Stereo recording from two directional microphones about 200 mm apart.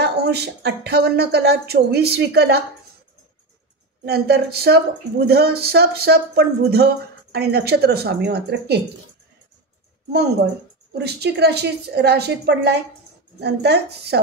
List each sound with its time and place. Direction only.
0.0 s speech: 55° right (ahead or behind)
4.0 s a woman's voice: 55° right (ahead or behind)
10.9 s speech: 55° right (ahead or behind)